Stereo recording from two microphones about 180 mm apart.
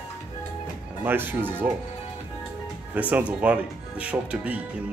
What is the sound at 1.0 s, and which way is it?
Speech, 10° right (ahead or behind).